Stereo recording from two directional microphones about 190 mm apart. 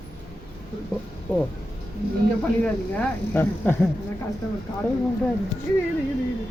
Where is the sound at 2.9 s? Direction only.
10° left (ahead or behind).